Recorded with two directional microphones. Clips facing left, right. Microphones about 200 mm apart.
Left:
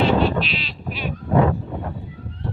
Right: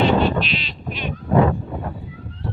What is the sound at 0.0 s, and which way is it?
Sheep, centre (ahead or behind).